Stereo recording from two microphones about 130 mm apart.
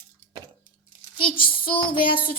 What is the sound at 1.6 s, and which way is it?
Child singing, 40° left (ahead or behind).